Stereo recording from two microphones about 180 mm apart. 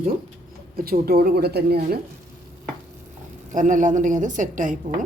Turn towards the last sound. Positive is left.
turn(degrees=-45)  # may be behind; listen again after turning